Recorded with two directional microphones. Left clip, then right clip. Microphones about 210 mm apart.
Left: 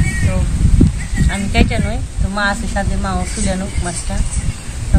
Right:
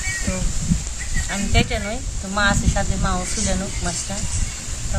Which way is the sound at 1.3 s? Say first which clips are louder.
Left 4 dB; 5° left (ahead or behind).